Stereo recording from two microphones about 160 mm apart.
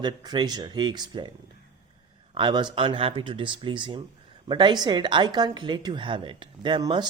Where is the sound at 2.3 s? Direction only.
30° right (ahead or behind).